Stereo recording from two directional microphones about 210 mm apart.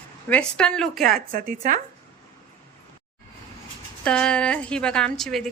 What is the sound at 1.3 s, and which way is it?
Speech, 45° right (ahead or behind).